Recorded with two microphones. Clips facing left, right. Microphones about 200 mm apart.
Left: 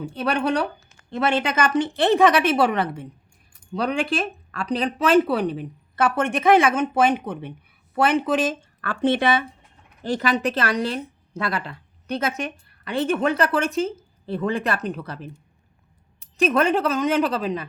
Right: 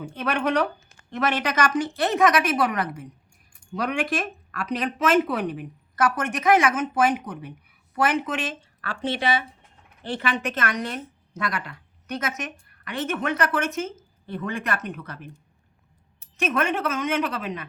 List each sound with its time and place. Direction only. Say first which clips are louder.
0.1 s a woman's voice: left 1 dB; 35° left (ahead or behind); by 9.4 s 55° left (ahead or behind)
10.0 s a woman's voice: left 5 dB; 40° left (ahead or behind)
16.4 s a woman's voice: left 5 dB; 35° left (ahead or behind)